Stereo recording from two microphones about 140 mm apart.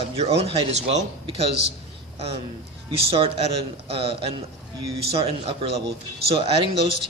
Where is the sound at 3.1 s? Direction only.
40° right (ahead or behind).